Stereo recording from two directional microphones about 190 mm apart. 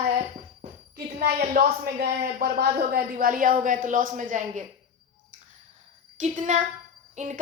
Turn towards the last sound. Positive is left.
turn(degrees=-40)  # may be behind; listen again after turning